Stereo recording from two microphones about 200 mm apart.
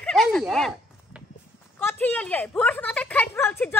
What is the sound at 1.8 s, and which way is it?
A woman's voice, 10° left (ahead or behind).